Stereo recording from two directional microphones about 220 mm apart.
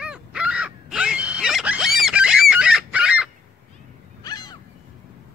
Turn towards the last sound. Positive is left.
turn(degrees=20)  # may be behind; listen again after turning